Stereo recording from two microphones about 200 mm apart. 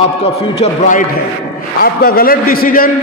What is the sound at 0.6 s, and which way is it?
Speech, 40° left (ahead or behind).